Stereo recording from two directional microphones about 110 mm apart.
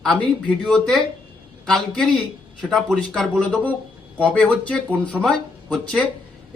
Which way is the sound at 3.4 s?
10° left (ahead or behind).